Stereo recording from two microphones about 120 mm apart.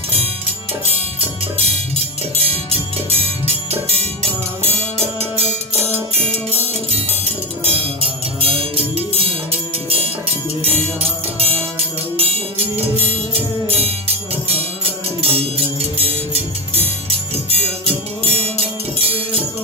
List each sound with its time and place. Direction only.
2.4 s music: 55° right (ahead or behind)
7.6 s music: 50° right (ahead or behind)
17.5 s music: 55° right (ahead or behind)